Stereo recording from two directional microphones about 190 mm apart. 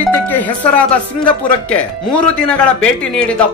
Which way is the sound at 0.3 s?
10° left (ahead or behind).